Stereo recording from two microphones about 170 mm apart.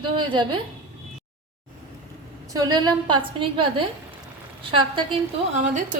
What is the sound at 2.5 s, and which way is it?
A woman's voice, 25° right (ahead or behind).